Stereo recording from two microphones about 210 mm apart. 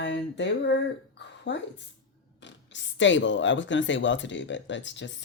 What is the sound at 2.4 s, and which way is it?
Speech, 60° left (ahead or behind).